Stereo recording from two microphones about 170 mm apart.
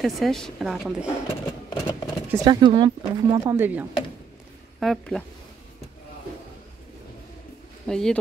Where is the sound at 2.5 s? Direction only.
25° right (ahead or behind).